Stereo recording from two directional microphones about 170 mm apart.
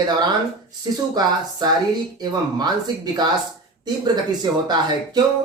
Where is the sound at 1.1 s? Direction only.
25° right (ahead or behind).